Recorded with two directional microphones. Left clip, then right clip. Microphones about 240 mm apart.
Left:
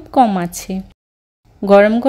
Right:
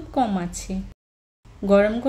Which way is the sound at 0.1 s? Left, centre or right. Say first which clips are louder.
Left 11 dB; left.